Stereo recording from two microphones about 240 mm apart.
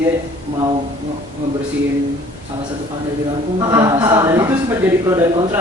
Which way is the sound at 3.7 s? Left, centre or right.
Centre.